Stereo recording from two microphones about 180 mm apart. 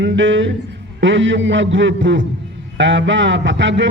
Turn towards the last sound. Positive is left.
turn(degrees=-85)